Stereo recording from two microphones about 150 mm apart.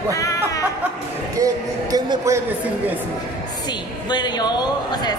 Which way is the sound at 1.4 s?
25° right (ahead or behind).